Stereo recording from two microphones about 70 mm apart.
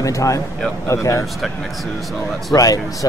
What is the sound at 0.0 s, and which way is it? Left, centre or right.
Speech, left.